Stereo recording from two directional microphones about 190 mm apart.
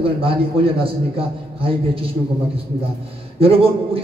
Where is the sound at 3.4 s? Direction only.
30° right (ahead or behind).